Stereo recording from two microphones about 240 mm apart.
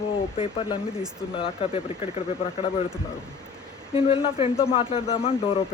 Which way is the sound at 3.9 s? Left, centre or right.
Left.